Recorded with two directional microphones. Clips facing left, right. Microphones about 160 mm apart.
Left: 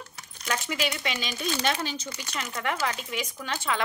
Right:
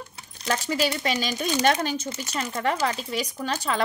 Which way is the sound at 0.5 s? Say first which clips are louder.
Right 5 dB; 35° right (ahead or behind).